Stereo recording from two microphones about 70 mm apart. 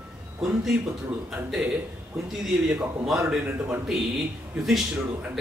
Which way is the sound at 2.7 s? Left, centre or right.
Centre.